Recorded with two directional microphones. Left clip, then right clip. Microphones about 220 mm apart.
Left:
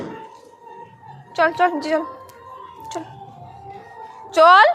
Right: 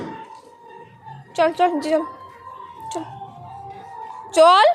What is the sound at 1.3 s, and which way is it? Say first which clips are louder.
Speech: even; 20° right (ahead or behind).